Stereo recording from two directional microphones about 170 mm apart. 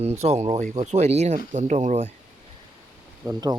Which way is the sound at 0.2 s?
40° right (ahead or behind).